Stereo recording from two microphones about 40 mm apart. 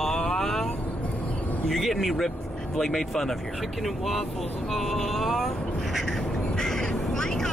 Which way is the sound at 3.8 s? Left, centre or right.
Centre.